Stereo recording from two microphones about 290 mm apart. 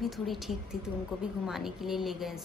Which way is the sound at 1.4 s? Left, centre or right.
Centre.